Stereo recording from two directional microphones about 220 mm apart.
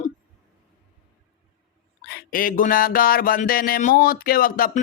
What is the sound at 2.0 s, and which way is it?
Speech, 40° left (ahead or behind).